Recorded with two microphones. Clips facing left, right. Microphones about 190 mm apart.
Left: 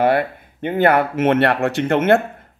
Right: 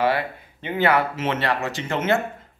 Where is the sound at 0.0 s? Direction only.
50° left (ahead or behind).